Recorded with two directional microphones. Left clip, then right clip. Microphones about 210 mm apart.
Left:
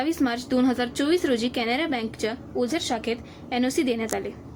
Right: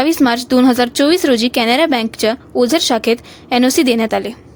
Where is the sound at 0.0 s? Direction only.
55° right (ahead or behind).